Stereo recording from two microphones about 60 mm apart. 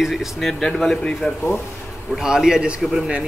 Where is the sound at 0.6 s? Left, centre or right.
Centre.